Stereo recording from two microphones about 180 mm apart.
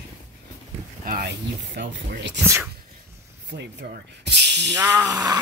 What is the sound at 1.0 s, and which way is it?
Speech, 55° right (ahead or behind).